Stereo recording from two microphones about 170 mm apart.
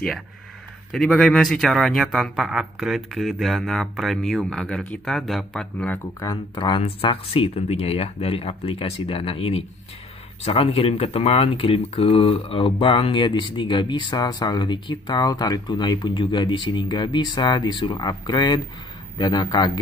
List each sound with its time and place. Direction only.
0.9 s speech: 5° left (ahead or behind)
6.2 s speech: 25° left (ahead or behind)